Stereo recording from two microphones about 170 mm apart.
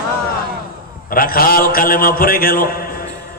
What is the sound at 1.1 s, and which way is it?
Mantra, 60° left (ahead or behind).